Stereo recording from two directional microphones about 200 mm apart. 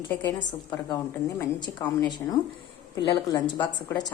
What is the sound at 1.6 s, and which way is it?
A woman's voice, 20° left (ahead or behind).